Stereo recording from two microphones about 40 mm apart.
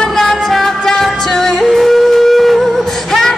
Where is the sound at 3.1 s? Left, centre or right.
Centre.